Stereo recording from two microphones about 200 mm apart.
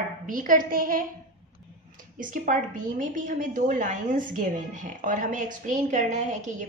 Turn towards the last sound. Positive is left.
turn(degrees=-40)  # may be behind; listen again after turning